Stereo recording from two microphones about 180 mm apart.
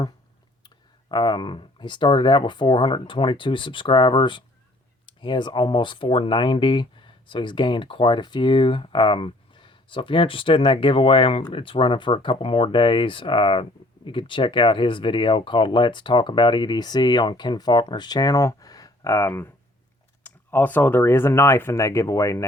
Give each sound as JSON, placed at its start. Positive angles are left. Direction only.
{"t": 1.1, "sound": "speech", "side_deg": 25}